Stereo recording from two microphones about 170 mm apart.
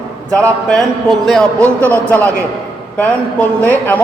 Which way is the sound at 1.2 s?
Centre (ahead or behind).